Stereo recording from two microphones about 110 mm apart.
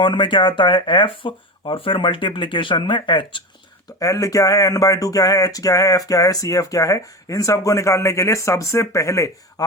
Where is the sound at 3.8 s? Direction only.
30° left (ahead or behind).